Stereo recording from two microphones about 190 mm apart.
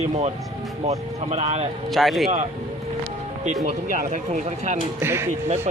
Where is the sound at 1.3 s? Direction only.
30° right (ahead or behind).